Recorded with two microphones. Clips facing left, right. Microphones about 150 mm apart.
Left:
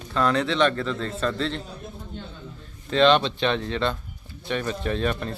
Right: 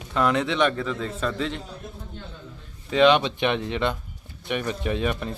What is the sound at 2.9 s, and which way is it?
Speech, 10° right (ahead or behind).